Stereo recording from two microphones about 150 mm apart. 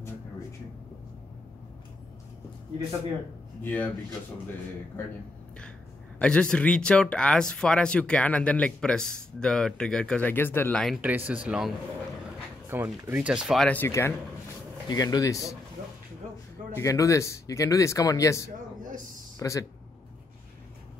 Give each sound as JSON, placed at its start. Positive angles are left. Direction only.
{"t": 3.6, "sound": "speech", "side_deg": 15}
{"t": 6.1, "sound": "speech", "side_deg": 5}
{"t": 11.0, "sound": "speech", "side_deg": -10}
{"t": 13.7, "sound": "speech", "side_deg": 15}
{"t": 16.7, "sound": "speech", "side_deg": 20}